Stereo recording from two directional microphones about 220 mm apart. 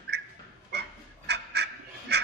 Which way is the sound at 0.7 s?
50° right (ahead or behind).